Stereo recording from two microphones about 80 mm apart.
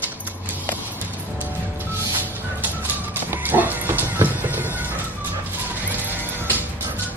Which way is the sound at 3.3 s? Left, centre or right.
Right.